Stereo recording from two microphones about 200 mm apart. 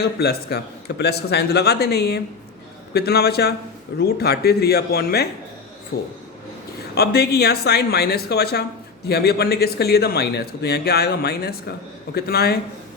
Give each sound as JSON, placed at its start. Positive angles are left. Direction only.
{"t": 0.0, "sound": "a man's voice", "side_deg": 55}